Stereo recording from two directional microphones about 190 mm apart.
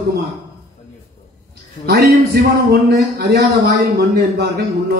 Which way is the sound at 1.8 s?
60° right (ahead or behind).